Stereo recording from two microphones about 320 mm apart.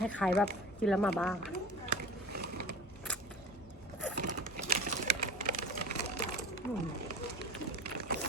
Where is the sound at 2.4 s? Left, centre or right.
Right.